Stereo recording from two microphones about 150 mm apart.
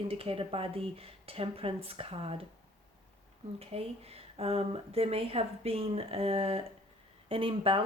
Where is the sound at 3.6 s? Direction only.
40° right (ahead or behind).